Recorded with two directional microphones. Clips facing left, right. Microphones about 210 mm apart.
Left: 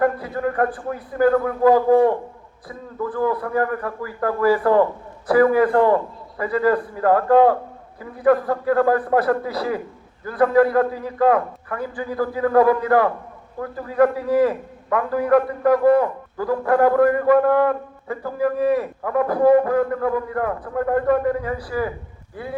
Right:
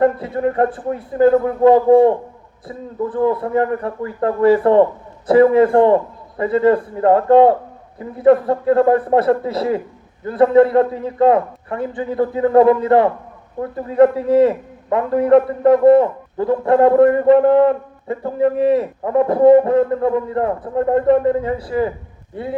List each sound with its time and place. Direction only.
0.0 s a man's voice: 25° right (ahead or behind)